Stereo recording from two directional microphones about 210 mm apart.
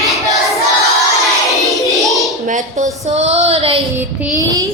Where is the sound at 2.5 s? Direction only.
35° right (ahead or behind).